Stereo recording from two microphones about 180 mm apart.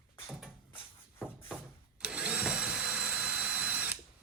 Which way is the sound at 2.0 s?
5° right (ahead or behind).